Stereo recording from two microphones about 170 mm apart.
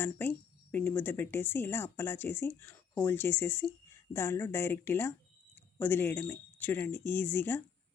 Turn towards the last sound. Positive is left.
turn(degrees=10)  # may be behind; listen again after turning